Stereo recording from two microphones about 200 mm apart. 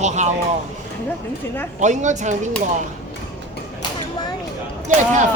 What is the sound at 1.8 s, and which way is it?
Speech, 35° right (ahead or behind).